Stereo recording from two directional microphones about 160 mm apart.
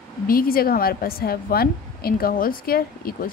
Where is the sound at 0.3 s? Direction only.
65° left (ahead or behind).